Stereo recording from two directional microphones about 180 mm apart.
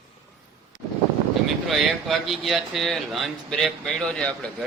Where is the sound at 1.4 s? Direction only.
Centre (ahead or behind).